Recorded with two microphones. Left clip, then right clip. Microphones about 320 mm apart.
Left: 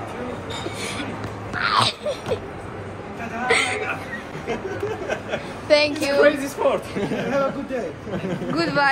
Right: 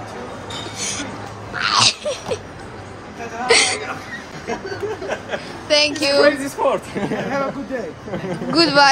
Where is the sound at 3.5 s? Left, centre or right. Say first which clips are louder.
Right 5 dB; centre.